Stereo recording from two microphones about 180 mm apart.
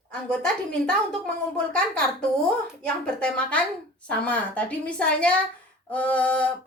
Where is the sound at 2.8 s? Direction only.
5° left (ahead or behind).